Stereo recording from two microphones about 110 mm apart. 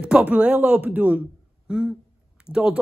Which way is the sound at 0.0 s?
10° right (ahead or behind).